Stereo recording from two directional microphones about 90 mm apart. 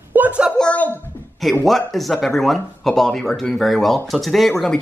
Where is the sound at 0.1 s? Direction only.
20° right (ahead or behind).